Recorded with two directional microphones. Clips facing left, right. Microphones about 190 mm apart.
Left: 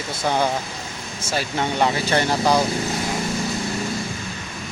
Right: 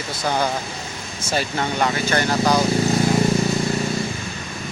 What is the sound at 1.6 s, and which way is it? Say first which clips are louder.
Speech: left 3 dB; 25° left (ahead or behind).